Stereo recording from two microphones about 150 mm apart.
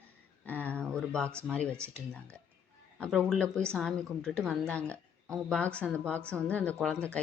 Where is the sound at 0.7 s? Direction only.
5° left (ahead or behind).